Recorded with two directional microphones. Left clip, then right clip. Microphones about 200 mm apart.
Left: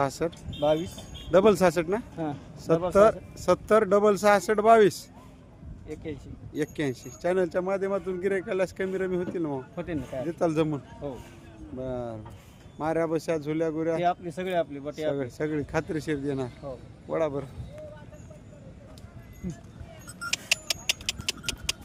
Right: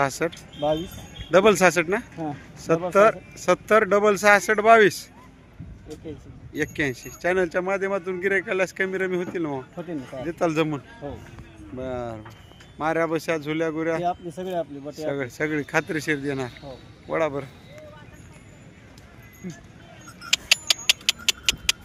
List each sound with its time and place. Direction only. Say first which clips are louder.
0.0 s speech: right 4 dB; centre (ahead or behind)
2.1 s speech: right 1 dB; 15° right (ahead or behind)
2.9 s speech: right 3 dB; 5° left (ahead or behind)
6.5 s speech: right 4 dB; 5° left (ahead or behind)
9.7 s speech: even; 15° right (ahead or behind)
10.2 s speech: right 3 dB; 5° left (ahead or behind)
11.8 s speech: right 3 dB; centre (ahead or behind)
14.3 s speech: even; 15° right (ahead or behind)
15.1 s speech: right 3 dB; centre (ahead or behind)
20.3 s a sound: right 8 dB; 5° left (ahead or behind)